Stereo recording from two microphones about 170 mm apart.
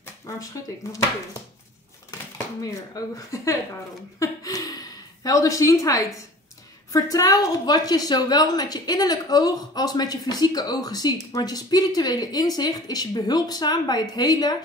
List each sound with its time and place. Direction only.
2.6 s a woman's voice: 20° left (ahead or behind)
4.2 s a sound: 20° left (ahead or behind)
6.9 s a woman's voice: 20° left (ahead or behind)